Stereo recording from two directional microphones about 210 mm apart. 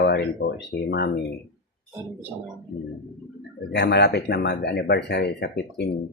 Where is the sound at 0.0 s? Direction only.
50° left (ahead or behind).